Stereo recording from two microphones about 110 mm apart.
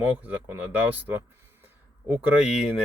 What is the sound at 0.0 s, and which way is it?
Speech, 15° right (ahead or behind).